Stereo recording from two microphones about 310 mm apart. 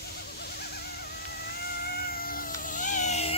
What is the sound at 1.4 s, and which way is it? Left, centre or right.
Cat, left.